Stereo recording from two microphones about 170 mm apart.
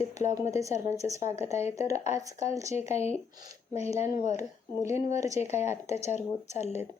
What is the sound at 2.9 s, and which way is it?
A woman's voice, 40° left (ahead or behind).